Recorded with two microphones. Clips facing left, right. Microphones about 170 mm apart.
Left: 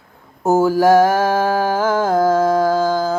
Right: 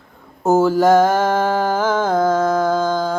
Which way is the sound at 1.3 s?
10° left (ahead or behind).